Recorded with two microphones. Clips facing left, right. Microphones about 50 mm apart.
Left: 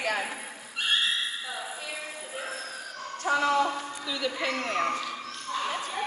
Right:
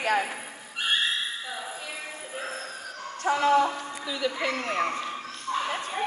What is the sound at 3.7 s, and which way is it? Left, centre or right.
Speech, centre.